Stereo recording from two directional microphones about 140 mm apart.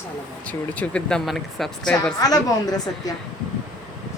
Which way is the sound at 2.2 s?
30° left (ahead or behind).